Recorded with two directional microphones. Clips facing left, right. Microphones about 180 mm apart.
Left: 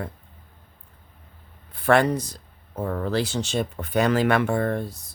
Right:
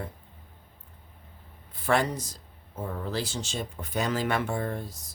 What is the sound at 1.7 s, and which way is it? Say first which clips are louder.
Speech: left 7 dB; 65° left (ahead or behind).